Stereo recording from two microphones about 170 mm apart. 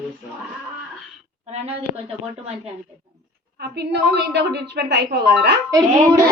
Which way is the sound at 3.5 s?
75° right (ahead or behind).